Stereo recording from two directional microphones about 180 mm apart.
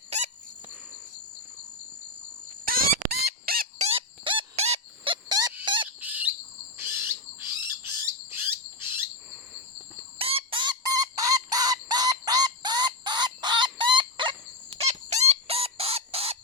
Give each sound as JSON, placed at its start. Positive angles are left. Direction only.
{"t": 2.6, "sound": "chicken", "side_deg": -55}
{"t": 3.8, "sound": "a sound", "side_deg": -30}
{"t": 5.6, "sound": "squawk", "side_deg": -25}
{"t": 6.0, "sound": "bird", "side_deg": -10}
{"t": 8.3, "sound": "rodents", "side_deg": -15}
{"t": 10.2, "sound": "chicken", "side_deg": -30}